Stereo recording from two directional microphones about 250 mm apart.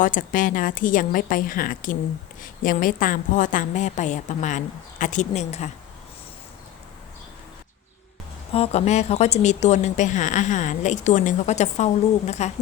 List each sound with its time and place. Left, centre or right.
0.0 s a woman's voice: left
8.5 s speech: left